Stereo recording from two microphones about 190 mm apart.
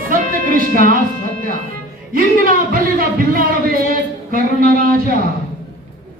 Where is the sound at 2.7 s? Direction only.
50° right (ahead or behind).